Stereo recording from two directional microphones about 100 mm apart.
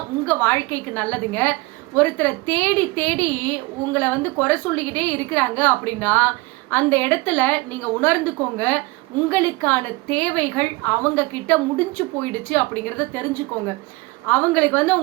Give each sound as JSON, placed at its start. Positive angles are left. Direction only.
{"t": 0.3, "sound": "a woman's voice", "side_deg": 20}